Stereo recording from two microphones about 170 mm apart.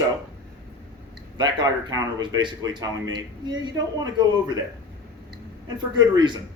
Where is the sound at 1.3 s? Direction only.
25° right (ahead or behind).